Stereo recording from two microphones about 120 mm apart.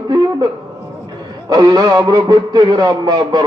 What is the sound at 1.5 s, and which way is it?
A man's voice, 35° right (ahead or behind).